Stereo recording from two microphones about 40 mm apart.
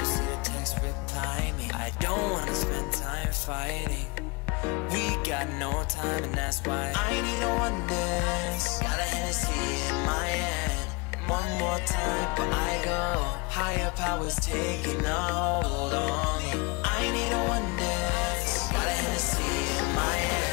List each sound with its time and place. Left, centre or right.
2.0 s music: centre
4.6 s music: centre